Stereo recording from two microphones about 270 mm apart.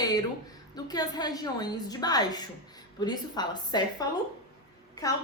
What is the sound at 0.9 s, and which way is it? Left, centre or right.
A woman's voice, centre.